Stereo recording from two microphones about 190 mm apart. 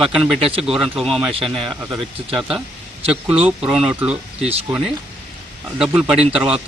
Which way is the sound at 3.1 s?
5° right (ahead or behind).